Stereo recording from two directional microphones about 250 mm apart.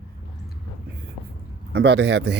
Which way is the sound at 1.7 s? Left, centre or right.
Right.